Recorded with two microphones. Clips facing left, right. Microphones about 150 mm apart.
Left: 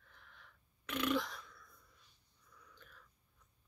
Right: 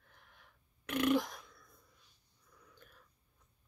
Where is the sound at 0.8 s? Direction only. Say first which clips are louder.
Right 5 dB; 55° right (ahead or behind).